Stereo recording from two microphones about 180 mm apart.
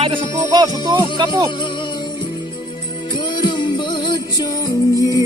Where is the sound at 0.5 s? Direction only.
20° right (ahead or behind).